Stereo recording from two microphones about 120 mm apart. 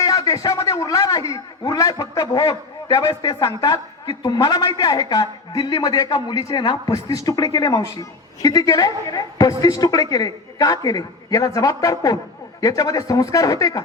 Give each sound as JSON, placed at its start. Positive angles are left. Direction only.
{"t": 0.0, "sound": "a man's voice", "side_deg": 30}